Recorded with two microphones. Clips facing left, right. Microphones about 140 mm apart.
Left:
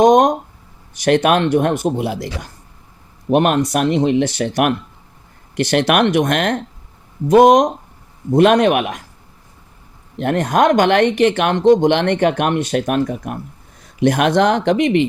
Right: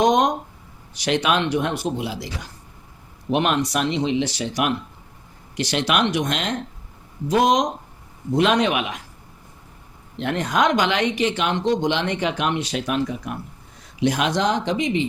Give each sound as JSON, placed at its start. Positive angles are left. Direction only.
{"t": 0.0, "sound": "speech", "side_deg": 50}
{"t": 10.2, "sound": "speech", "side_deg": 50}